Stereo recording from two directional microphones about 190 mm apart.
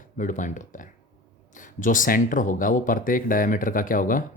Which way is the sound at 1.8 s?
45° left (ahead or behind).